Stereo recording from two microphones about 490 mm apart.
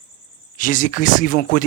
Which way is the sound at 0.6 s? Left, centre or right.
Centre.